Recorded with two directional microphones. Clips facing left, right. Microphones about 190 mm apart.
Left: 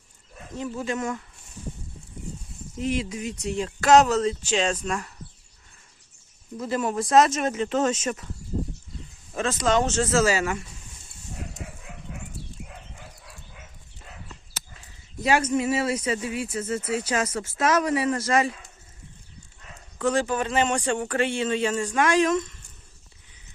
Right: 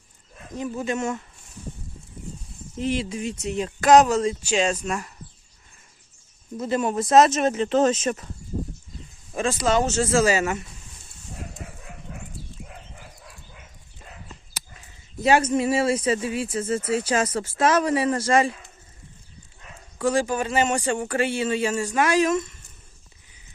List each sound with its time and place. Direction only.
0.5 s speech: 15° right (ahead or behind)
2.8 s speech: 30° right (ahead or behind); by 5.1 s 10° right (ahead or behind)
6.6 s speech: 20° right (ahead or behind)
9.3 s speech: 10° right (ahead or behind)
15.2 s speech: 25° right (ahead or behind)
20.0 s speech: 10° right (ahead or behind)